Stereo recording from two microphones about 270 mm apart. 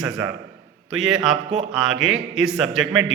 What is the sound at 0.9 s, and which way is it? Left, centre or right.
A man's voice, centre.